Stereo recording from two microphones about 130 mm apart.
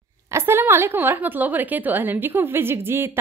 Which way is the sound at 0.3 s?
20° right (ahead or behind).